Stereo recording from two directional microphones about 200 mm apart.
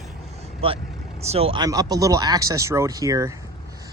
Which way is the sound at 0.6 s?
30° right (ahead or behind).